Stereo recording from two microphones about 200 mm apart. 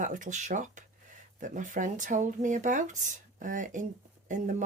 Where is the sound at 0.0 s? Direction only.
40° right (ahead or behind).